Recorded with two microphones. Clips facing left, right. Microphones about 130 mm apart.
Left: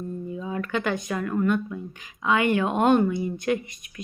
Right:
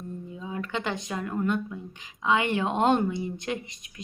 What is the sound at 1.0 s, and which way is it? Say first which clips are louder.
Speech: left 4 dB; 20° right (ahead or behind).